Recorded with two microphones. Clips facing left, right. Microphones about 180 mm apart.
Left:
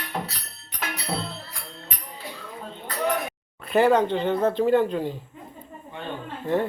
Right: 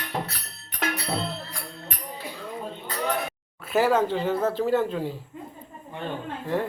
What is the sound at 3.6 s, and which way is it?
A man's voice, 5° right (ahead or behind).